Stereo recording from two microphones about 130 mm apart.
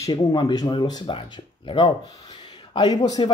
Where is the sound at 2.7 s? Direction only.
35° left (ahead or behind).